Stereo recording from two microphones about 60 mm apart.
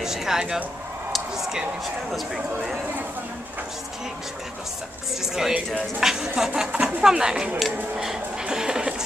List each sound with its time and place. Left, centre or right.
0.0 s speech: centre
1.1 s a sound: centre
2.0 s speech: centre
5.2 s speech: centre
6.7 s speech: centre